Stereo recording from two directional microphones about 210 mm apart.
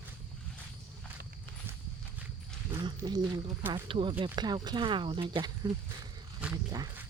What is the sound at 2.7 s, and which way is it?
Speech, 15° right (ahead or behind).